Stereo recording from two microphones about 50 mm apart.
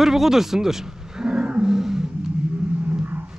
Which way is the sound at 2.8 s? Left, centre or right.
Right.